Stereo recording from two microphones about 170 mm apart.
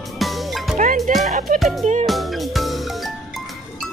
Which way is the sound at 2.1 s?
Centre (ahead or behind).